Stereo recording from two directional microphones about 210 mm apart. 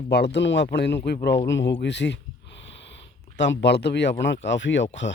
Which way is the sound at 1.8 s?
55° left (ahead or behind).